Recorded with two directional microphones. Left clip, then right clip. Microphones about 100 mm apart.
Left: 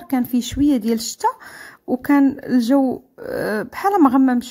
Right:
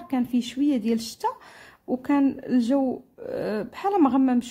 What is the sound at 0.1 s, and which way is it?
Speech, 40° left (ahead or behind).